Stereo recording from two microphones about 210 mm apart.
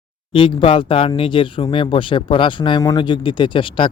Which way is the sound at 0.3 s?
25° left (ahead or behind).